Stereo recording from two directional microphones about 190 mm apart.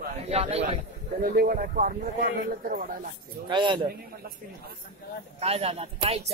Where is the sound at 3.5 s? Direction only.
25° right (ahead or behind).